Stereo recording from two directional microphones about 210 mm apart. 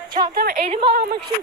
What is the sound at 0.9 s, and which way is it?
Speech, 50° right (ahead or behind).